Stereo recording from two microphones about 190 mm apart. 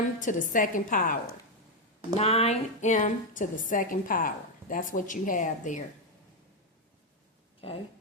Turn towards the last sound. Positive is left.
turn(degrees=30)  # may be behind; listen again after turning